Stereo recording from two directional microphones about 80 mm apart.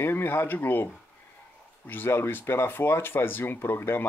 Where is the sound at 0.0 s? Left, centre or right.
Left.